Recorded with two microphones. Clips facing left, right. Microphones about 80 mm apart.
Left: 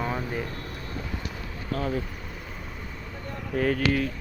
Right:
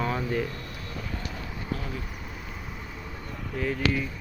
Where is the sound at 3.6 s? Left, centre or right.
Left.